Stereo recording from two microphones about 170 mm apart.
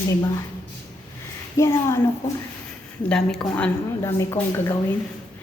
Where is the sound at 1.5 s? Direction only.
15° left (ahead or behind).